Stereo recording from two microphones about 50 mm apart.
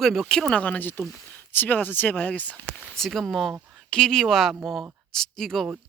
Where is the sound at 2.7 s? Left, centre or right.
Centre.